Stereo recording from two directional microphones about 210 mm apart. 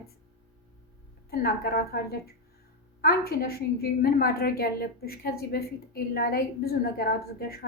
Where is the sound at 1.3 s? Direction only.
45° left (ahead or behind).